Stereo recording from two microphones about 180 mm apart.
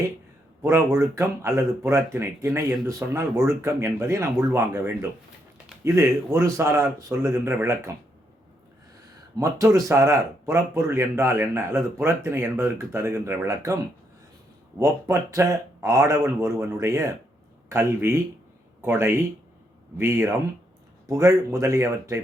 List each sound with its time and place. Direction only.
0.6 s speech: 15° right (ahead or behind)
9.4 s speech: 15° right (ahead or behind)
14.8 s speech: 15° right (ahead or behind)